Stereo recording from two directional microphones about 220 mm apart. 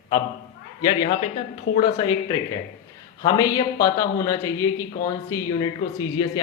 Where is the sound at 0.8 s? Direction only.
20° left (ahead or behind).